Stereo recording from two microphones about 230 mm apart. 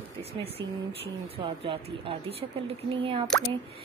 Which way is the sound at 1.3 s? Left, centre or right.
Right.